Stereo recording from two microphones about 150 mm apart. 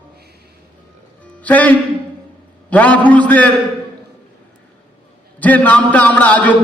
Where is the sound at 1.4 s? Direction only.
10° left (ahead or behind).